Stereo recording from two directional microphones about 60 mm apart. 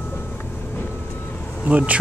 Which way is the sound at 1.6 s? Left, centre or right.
Right.